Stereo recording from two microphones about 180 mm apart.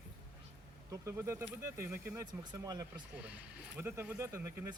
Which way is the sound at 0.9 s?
15° right (ahead or behind).